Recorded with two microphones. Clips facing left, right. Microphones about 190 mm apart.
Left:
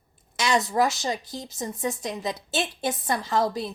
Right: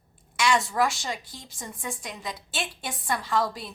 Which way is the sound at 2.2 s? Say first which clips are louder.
Left 5 dB; 25° left (ahead or behind).